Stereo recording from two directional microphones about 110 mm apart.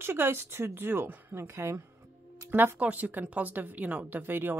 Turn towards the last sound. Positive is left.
turn(degrees=-20)  # may be behind; listen again after turning